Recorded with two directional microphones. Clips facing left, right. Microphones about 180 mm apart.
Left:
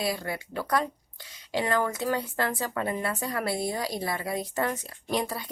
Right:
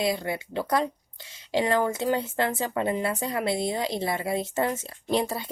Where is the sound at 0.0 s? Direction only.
25° right (ahead or behind).